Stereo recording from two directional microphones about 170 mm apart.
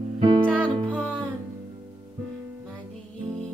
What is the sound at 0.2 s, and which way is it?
Music, 30° right (ahead or behind).